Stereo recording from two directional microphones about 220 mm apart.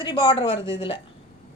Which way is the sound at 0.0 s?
20° left (ahead or behind).